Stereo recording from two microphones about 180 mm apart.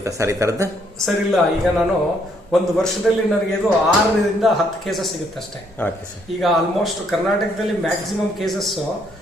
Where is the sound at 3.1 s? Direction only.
Centre (ahead or behind).